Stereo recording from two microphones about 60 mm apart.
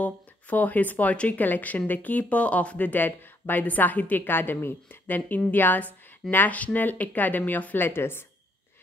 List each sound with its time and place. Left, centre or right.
0.0 s speech: left